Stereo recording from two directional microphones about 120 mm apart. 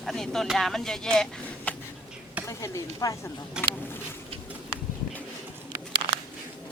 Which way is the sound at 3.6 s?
5° right (ahead or behind).